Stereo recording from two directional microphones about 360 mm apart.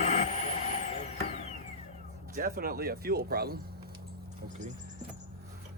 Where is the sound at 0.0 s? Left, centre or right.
Centre.